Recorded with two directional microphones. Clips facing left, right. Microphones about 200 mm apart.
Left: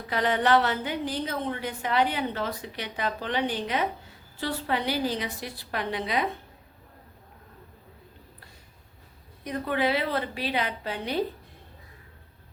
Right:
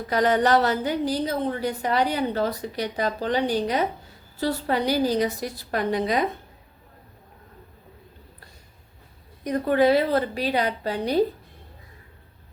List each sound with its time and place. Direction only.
0.1 s a woman's voice: 40° right (ahead or behind)
9.4 s a woman's voice: 45° right (ahead or behind)